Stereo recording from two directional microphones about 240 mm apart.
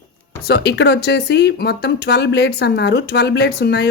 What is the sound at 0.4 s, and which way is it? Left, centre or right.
Speech, left.